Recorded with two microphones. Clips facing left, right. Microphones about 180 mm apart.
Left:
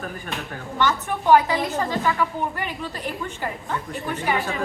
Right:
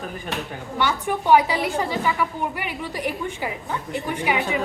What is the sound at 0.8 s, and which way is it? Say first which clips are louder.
A woman's voice: even; 10° right (ahead or behind).